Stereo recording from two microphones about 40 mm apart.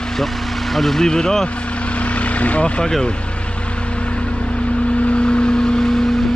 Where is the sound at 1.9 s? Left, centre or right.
Left.